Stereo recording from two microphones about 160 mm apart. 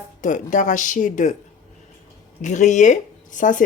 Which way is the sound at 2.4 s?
50° left (ahead or behind).